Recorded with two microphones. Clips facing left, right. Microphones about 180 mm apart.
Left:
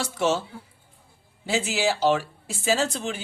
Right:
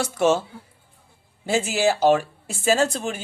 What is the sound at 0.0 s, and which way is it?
Speech, 55° right (ahead or behind).